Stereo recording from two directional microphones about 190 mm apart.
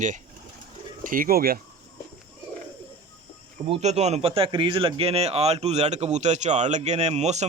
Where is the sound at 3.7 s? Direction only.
35° right (ahead or behind).